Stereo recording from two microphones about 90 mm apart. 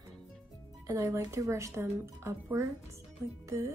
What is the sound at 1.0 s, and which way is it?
Speech, 30° right (ahead or behind).